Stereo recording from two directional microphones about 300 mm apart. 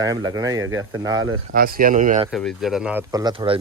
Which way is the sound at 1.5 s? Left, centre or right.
Right.